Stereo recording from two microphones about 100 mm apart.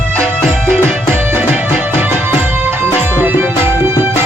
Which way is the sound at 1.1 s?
20° right (ahead or behind).